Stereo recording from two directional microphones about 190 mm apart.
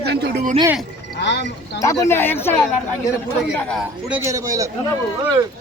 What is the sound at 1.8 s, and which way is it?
Speech, 15° left (ahead or behind).